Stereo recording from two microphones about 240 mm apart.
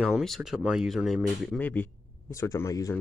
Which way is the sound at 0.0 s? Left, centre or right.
Centre.